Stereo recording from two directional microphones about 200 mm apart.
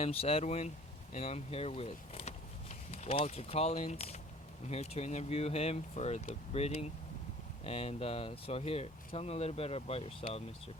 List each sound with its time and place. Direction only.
0.0 s speech: 30° left (ahead or behind)